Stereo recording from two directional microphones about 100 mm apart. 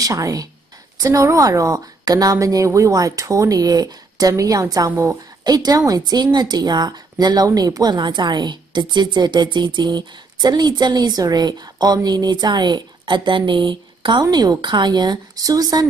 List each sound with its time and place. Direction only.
0.0 s a woman's voice: 35° right (ahead or behind); by 14.2 s 55° right (ahead or behind)
14.2 s a woman's voice: 40° right (ahead or behind)